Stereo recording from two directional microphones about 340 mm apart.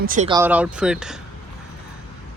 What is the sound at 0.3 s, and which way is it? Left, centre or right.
Speech, centre.